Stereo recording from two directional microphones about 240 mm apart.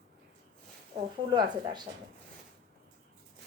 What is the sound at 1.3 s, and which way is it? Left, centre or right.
Speech, centre.